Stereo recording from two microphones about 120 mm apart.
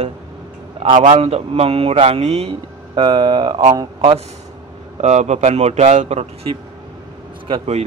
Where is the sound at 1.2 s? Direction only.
55° right (ahead or behind).